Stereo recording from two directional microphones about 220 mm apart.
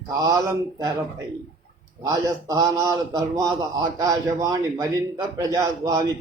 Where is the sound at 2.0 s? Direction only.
15° right (ahead or behind).